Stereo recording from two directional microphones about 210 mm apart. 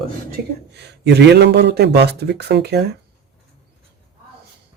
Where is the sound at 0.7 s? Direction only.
55° right (ahead or behind).